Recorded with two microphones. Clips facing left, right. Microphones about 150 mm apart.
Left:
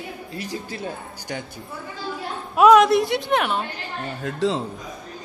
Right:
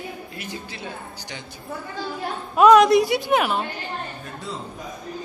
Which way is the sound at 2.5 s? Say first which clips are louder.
Even; centre (ahead or behind).